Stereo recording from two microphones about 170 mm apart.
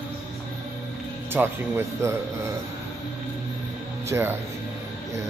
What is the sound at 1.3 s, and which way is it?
Speech, 10° right (ahead or behind).